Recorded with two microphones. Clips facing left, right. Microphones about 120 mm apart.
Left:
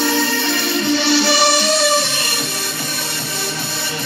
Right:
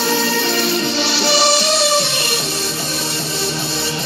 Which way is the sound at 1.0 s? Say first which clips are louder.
Left 2 dB; 50° left (ahead or behind).